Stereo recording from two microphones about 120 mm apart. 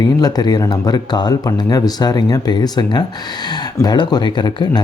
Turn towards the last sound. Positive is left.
turn(degrees=40)  # may be behind; listen again after turning